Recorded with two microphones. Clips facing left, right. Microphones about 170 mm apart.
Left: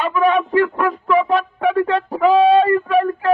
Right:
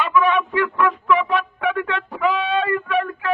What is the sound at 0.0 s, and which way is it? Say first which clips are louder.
A man's voice: left 2 dB; 40° left (ahead or behind).